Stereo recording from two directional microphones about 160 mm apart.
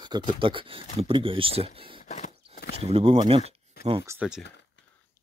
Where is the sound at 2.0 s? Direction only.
45° left (ahead or behind).